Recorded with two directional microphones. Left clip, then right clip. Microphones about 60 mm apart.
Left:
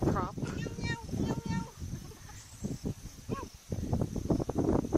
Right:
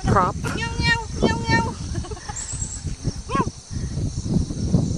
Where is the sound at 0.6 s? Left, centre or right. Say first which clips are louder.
Right 17 dB; right.